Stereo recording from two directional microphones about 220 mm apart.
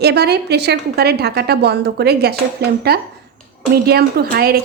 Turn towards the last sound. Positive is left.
turn(degrees=-45)  # may be behind; listen again after turning